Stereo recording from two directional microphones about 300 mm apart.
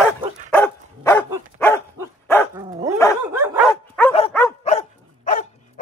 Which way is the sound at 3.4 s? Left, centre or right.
Centre.